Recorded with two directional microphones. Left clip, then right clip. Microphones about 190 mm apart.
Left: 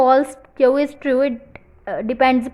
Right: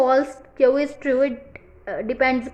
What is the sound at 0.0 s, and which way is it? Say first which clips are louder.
A woman's voice: left 4 dB; 25° left (ahead or behind).